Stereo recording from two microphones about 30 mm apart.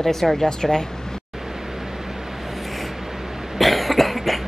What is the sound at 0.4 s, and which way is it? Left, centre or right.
Speech, left.